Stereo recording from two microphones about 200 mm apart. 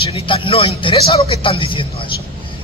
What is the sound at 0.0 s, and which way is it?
A man's voice, 25° left (ahead or behind).